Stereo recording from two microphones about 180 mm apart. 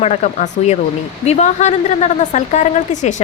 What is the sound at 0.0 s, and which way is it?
A woman's voice, 40° left (ahead or behind).